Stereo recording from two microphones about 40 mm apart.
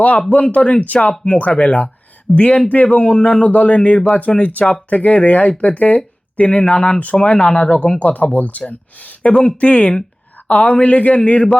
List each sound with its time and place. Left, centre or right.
0.4 s a man's voice: left
7.6 s a man's voice: left